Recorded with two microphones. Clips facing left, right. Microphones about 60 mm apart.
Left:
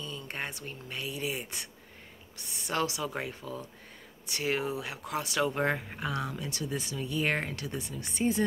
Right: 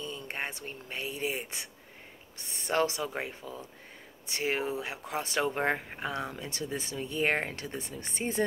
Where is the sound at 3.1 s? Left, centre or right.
Centre.